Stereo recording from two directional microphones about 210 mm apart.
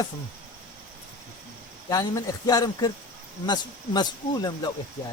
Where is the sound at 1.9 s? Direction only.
20° left (ahead or behind).